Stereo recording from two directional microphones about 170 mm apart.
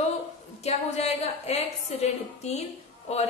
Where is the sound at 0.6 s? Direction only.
40° left (ahead or behind).